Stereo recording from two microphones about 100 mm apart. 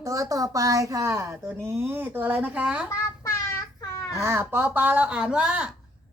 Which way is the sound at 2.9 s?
30° left (ahead or behind).